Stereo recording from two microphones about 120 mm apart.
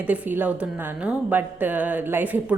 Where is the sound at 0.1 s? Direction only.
15° right (ahead or behind).